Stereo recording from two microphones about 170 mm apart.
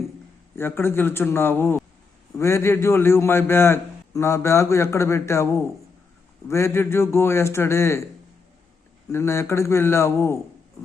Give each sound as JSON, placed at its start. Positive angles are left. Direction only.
{"t": 0.5, "sound": "a man's voice", "side_deg": 15}
{"t": 9.1, "sound": "a man's voice", "side_deg": 15}